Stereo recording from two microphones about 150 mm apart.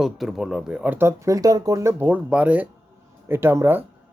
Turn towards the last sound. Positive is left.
turn(degrees=-15)  # may be behind; listen again after turning